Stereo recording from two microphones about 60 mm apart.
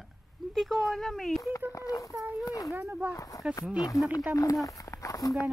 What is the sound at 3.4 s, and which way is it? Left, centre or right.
Speech, right.